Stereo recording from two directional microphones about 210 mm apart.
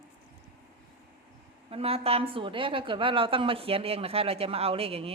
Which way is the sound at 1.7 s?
30° right (ahead or behind).